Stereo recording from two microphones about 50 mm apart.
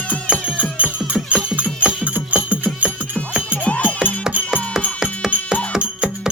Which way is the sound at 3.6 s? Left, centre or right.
Left.